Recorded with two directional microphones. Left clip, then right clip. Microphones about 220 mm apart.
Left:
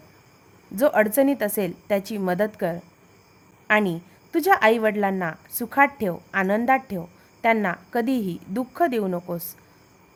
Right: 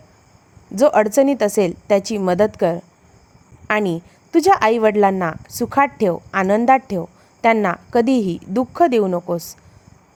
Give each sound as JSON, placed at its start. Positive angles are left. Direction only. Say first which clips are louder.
{"t": 0.8, "sound": "a woman's voice", "louder": "right 5 dB", "side_deg": -20}